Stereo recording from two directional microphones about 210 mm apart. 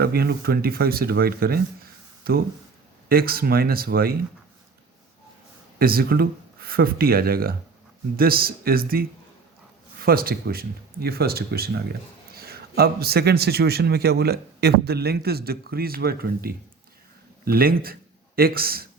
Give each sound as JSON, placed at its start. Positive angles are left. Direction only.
{"t": 0.0, "sound": "speech", "side_deg": -45}
{"t": 5.8, "sound": "speech", "side_deg": -45}